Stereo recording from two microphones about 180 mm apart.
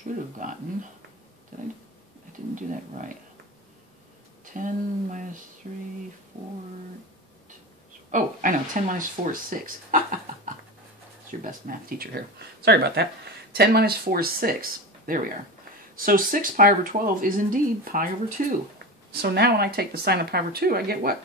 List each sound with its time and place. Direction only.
0.4 s speech: 45° right (ahead or behind)
4.6 s speech: 45° right (ahead or behind)
8.1 s speech: 45° right (ahead or behind)
11.4 s speech: 55° right (ahead or behind)
19.2 s speech: 60° right (ahead or behind)